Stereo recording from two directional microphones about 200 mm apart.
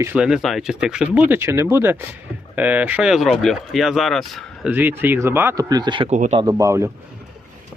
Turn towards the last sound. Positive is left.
turn(degrees=-15)  # may be behind; listen again after turning